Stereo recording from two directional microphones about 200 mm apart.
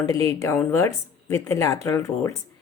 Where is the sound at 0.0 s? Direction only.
15° left (ahead or behind).